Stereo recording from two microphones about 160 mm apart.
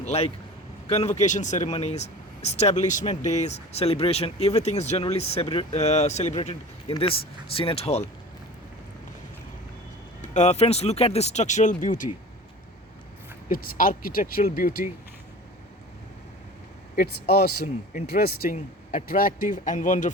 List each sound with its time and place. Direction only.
0.0 s a man's voice: 40° left (ahead or behind)
10.2 s speech: 45° left (ahead or behind)
13.5 s a man's voice: 60° left (ahead or behind)
16.9 s speech: 70° left (ahead or behind)
18.5 s a man's voice: 55° left (ahead or behind)